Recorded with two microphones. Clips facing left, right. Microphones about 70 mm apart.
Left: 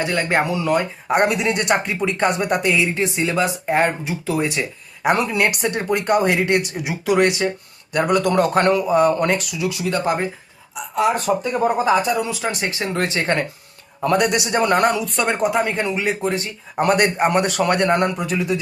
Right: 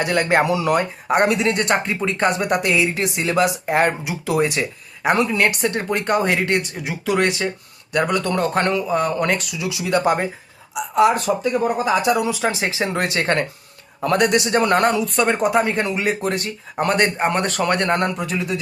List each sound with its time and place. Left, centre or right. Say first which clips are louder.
0.0 s speech: right 2 dB; centre
5.0 s speech: even; centre
8.2 s a man's voice: left 3 dB; centre
11.3 s speech: left 1 dB; centre
12.0 s speech: right 3 dB; centre